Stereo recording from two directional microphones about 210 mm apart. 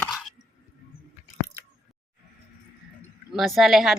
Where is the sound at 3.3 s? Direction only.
Centre (ahead or behind).